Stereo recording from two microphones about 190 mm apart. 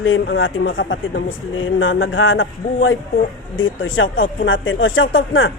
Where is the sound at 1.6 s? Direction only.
90° left.